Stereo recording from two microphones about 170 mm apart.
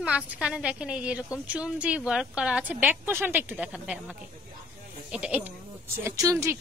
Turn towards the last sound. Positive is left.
turn(degrees=-15)  # may be behind; listen again after turning